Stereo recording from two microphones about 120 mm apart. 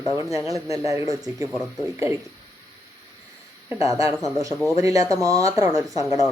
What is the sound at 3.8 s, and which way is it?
Speech, 25° right (ahead or behind).